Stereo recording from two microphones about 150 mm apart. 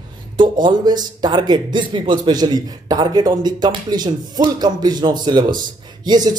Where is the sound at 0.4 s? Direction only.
30° right (ahead or behind).